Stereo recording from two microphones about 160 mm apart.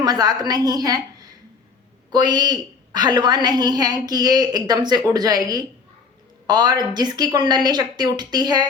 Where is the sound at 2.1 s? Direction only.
25° right (ahead or behind).